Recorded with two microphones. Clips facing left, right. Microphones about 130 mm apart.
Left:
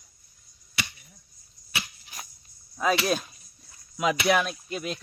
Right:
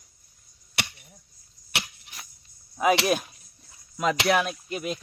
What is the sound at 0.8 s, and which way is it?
Chop, 65° right (ahead or behind).